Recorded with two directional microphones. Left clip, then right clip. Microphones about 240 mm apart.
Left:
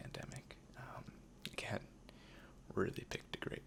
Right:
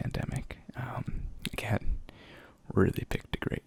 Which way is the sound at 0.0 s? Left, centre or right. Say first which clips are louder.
Right 12 dB; centre.